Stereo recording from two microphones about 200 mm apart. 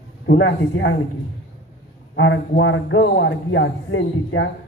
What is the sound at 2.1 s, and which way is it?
A man's voice, 65° left (ahead or behind).